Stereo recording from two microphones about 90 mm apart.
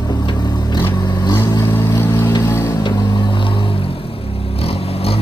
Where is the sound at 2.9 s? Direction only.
55° left (ahead or behind).